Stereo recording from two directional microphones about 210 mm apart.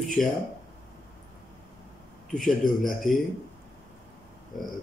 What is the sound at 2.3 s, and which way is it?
Speech, centre (ahead or behind).